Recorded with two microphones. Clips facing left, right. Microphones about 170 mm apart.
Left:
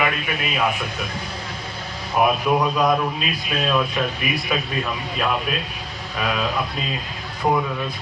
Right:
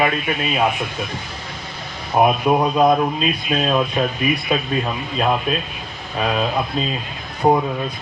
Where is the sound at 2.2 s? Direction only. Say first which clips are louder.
Right 3 dB; 30° right (ahead or behind).